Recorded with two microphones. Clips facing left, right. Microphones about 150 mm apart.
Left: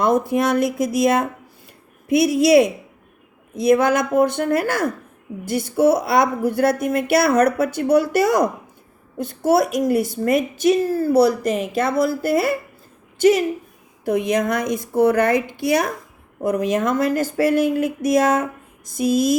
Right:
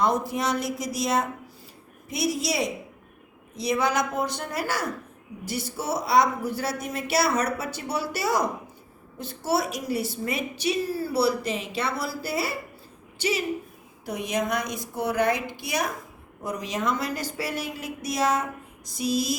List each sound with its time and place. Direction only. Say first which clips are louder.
0.0 s a woman's voice: left 7 dB; 55° left (ahead or behind)